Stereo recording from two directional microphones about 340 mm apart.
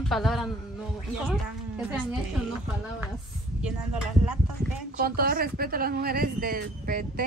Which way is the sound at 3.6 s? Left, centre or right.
Centre.